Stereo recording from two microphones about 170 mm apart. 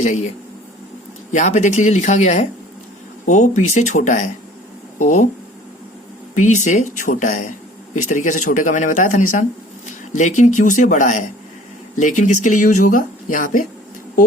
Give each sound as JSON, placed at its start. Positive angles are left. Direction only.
{"t": 0.0, "sound": "speech", "side_deg": 40}
{"t": 1.3, "sound": "speech", "side_deg": 45}
{"t": 6.3, "sound": "speech", "side_deg": 45}